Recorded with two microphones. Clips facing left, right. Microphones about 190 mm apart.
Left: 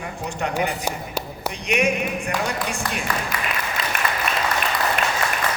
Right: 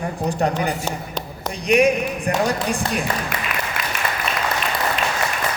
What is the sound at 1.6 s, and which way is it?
A man's voice, 35° right (ahead or behind).